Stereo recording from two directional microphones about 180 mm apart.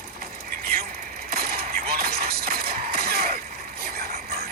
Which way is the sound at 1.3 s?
55° right (ahead or behind).